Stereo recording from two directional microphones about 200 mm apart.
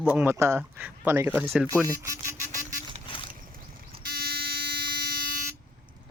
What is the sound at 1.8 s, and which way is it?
Music, 15° right (ahead or behind).